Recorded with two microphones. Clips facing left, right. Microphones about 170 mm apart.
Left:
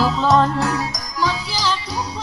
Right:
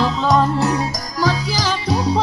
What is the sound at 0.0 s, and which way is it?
Music, 5° left (ahead or behind).